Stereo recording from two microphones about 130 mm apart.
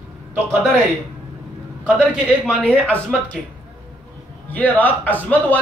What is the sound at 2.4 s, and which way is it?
Speech, 10° left (ahead or behind).